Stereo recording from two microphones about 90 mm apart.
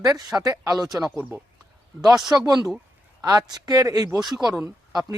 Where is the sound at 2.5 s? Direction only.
50° right (ahead or behind).